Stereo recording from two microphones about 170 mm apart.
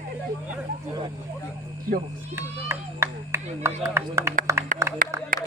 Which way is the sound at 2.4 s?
15° right (ahead or behind).